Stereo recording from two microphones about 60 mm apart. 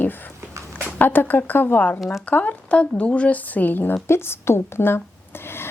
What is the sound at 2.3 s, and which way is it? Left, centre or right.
A woman's voice, left.